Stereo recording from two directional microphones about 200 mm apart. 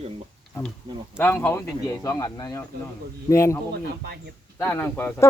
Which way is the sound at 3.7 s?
55° right (ahead or behind).